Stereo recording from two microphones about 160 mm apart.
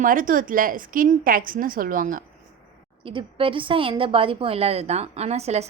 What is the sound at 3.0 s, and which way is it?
A woman's voice, 35° right (ahead or behind).